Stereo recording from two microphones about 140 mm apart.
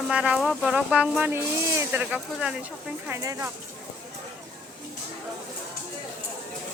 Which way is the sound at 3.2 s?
20° right (ahead or behind).